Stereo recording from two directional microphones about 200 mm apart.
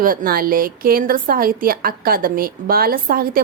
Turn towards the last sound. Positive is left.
turn(degrees=-45)  # may be behind; listen again after turning